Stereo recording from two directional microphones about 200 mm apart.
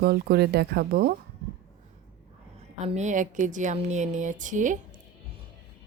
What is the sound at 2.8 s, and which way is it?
Speech, 35° right (ahead or behind).